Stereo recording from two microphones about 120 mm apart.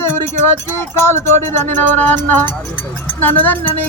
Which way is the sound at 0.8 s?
20° left (ahead or behind).